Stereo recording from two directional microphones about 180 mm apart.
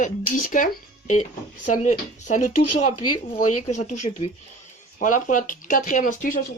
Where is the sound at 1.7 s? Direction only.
45° left (ahead or behind).